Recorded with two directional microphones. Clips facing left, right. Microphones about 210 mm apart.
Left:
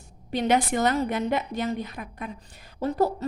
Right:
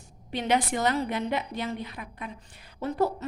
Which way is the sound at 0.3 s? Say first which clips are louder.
Left 3 dB; 45° left (ahead or behind).